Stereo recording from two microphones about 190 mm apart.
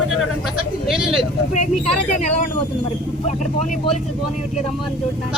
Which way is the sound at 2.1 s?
35° left (ahead or behind).